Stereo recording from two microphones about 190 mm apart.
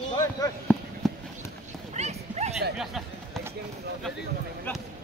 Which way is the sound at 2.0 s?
35° right (ahead or behind).